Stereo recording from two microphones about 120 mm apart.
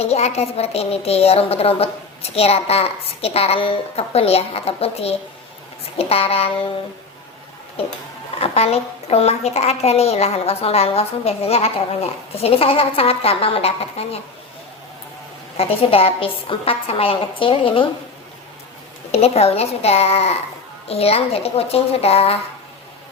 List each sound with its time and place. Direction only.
0.0 s a woman's voice: 60° left (ahead or behind)
8.4 s a woman's voice: 60° left (ahead or behind)
15.5 s a woman's voice: 55° left (ahead or behind)
19.1 s a woman's voice: 60° left (ahead or behind)